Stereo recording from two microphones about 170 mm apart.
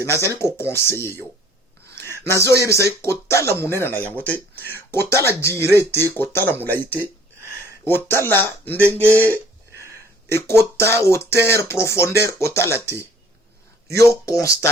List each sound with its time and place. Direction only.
0.0 s speech: 15° left (ahead or behind)
2.0 s a sound: 15° left (ahead or behind)
2.6 s speech: 15° left (ahead or behind)
7.9 s speech: 15° left (ahead or behind)
9.0 s speech: 15° right (ahead or behind)
10.2 s speech: 15° left (ahead or behind)
13.9 s speech: 20° left (ahead or behind)